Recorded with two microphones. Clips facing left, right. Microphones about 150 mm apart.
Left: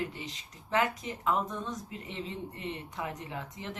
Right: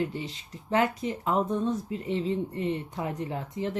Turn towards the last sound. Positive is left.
turn(degrees=-35)  # may be behind; listen again after turning